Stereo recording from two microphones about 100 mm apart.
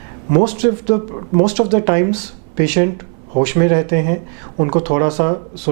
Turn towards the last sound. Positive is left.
turn(degrees=-15)  # may be behind; listen again after turning